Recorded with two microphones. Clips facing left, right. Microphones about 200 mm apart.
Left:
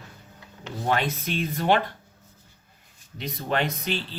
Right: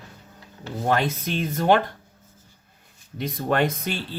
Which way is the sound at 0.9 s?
45° right (ahead or behind).